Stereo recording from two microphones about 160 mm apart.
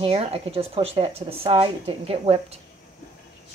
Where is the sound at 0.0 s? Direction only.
35° right (ahead or behind).